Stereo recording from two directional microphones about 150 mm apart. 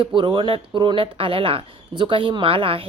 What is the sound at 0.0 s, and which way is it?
Speech, 30° right (ahead or behind).